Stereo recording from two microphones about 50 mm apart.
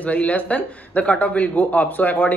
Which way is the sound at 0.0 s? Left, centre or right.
Left.